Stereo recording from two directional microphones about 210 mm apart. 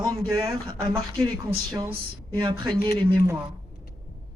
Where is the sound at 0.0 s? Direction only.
15° right (ahead or behind).